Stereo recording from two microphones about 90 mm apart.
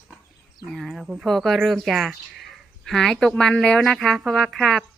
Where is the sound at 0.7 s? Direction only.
Centre (ahead or behind).